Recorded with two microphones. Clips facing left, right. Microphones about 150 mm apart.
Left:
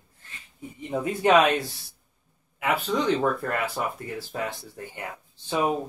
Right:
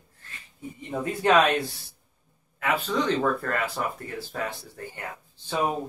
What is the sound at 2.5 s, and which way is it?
Speech, 10° left (ahead or behind).